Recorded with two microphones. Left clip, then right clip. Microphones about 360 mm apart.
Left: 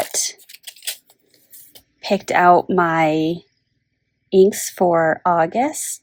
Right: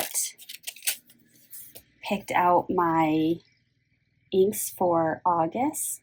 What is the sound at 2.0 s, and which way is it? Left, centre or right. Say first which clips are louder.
Speech: left 8 dB; centre.